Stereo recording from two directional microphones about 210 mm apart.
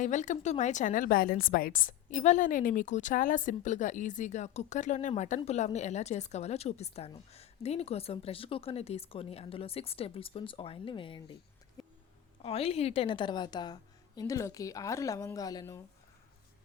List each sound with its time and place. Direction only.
0.0 s a woman's voice: 35° left (ahead or behind)
11.8 s music: centre (ahead or behind)
12.4 s a woman's voice: 30° left (ahead or behind)